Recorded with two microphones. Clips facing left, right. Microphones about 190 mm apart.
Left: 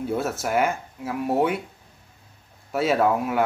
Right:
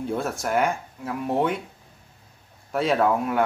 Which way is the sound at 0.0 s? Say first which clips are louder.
Left 1 dB; 5° left (ahead or behind).